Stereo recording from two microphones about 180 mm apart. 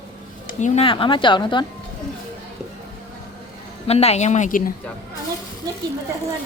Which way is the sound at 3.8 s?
35° left (ahead or behind).